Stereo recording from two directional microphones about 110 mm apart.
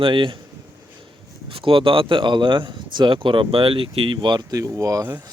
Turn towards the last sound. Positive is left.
turn(degrees=-25)  # may be behind; listen again after turning